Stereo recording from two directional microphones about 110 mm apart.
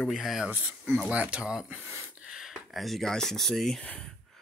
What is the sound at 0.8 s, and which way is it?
Speech, 5° left (ahead or behind).